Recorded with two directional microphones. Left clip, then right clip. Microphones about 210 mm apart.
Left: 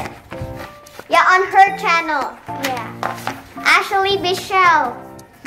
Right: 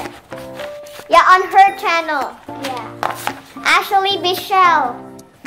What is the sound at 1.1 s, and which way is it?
Speech, 30° right (ahead or behind).